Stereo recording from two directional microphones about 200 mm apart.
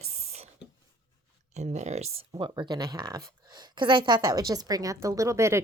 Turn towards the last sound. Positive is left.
turn(degrees=-15)  # may be behind; listen again after turning